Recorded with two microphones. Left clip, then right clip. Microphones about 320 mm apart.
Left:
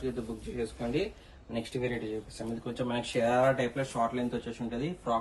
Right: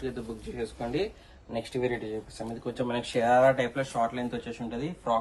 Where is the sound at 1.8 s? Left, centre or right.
Right.